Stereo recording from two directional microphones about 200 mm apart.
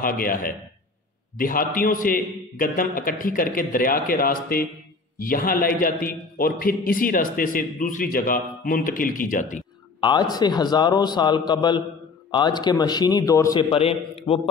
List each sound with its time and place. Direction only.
0.0 s a man's voice: 45° left (ahead or behind)
9.9 s a man's voice: 20° left (ahead or behind)